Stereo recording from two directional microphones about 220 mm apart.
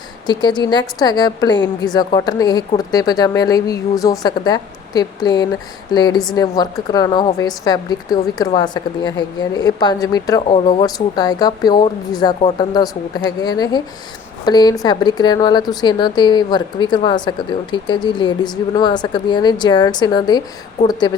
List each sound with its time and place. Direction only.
0.3 s speech: 20° left (ahead or behind)